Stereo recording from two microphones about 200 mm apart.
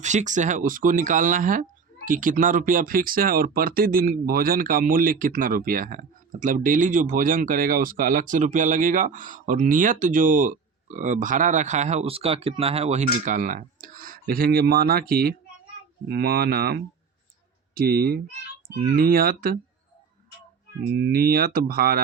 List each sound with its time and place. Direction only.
0.0 s speech: 35° right (ahead or behind)
20.9 s speech: 50° right (ahead or behind)